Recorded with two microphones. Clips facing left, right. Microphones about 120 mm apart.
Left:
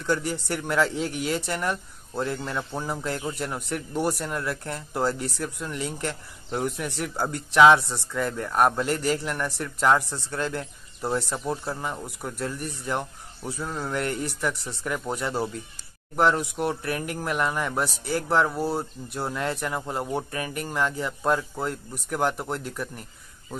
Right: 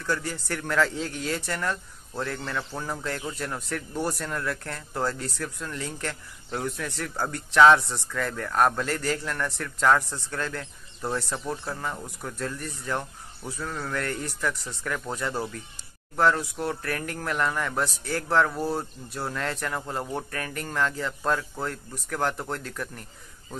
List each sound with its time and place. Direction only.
0.0 s speech: 20° left (ahead or behind)